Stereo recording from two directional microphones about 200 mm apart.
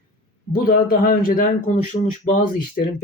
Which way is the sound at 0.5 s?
45° left (ahead or behind).